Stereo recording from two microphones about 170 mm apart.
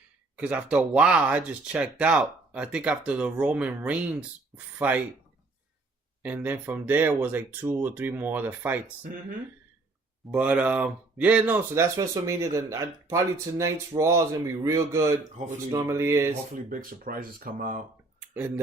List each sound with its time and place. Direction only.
0.3 s speech: 10° right (ahead or behind)
6.2 s speech: 10° right (ahead or behind)
10.3 s speech: 10° right (ahead or behind)
15.4 s speech: 45° right (ahead or behind)
15.7 s speech: 15° right (ahead or behind)
16.6 s speech: 55° right (ahead or behind)
18.3 s speech: 10° right (ahead or behind)